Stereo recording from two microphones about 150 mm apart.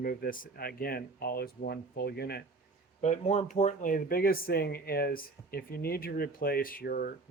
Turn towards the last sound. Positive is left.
turn(degrees=70)  # may be behind; listen again after turning